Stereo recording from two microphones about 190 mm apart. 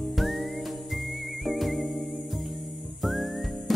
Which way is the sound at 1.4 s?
Centre (ahead or behind).